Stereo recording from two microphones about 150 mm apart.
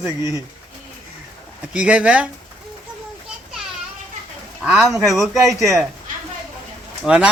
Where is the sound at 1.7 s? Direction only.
5° right (ahead or behind).